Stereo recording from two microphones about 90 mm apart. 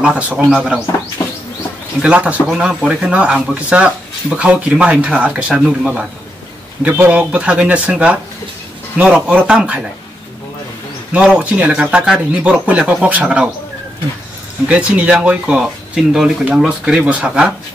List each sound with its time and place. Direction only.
0.0 s speech: 15° right (ahead or behind)
1.2 s bird: 40° left (ahead or behind)
2.0 s speech: 15° right (ahead or behind)
11.1 s speech: 15° right (ahead or behind)
14.7 s speech: 15° right (ahead or behind)